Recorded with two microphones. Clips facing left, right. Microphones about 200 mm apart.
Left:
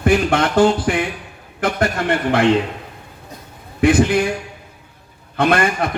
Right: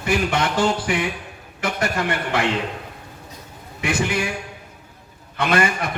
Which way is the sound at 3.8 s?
55° left (ahead or behind).